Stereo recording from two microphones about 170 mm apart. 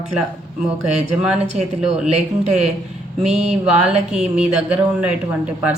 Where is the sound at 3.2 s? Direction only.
40° right (ahead or behind).